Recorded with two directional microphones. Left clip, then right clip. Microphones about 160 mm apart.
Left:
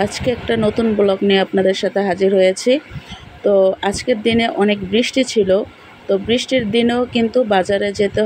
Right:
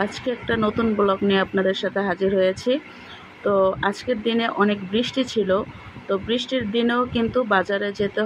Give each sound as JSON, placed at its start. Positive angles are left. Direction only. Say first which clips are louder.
{"t": 0.0, "sound": "speech", "louder": "left 6 dB", "side_deg": 30}